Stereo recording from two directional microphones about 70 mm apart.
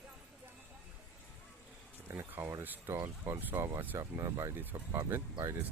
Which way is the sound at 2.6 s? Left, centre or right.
Right.